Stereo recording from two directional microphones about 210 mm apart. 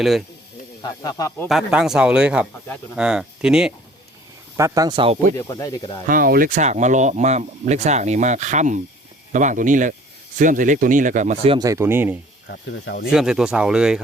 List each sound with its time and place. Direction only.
0.8 s speech: 15° left (ahead or behind)
1.5 s speech: centre (ahead or behind)
4.5 s speech: 15° right (ahead or behind)
5.4 s speech: 15° left (ahead or behind)
6.1 s speech: 45° right (ahead or behind); by 12.1 s 10° right (ahead or behind)
12.5 s speech: 55° left (ahead or behind)
13.1 s speech: 5° right (ahead or behind)